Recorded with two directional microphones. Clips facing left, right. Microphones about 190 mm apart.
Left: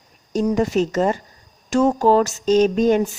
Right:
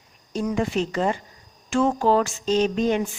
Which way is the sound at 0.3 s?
40° left (ahead or behind).